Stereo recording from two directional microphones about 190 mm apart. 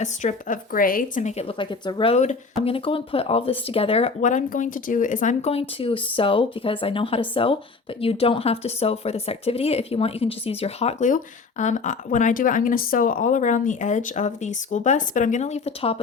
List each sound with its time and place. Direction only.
0.0 s speech: 40° left (ahead or behind)